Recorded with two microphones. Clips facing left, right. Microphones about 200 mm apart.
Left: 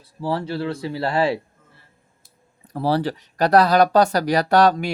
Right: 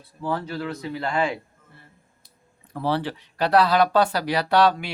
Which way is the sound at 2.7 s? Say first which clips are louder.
Left 4 dB; 40° left (ahead or behind).